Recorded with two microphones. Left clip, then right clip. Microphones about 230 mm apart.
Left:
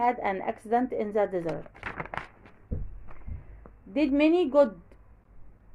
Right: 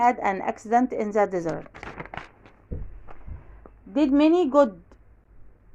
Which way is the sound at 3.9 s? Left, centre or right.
Right.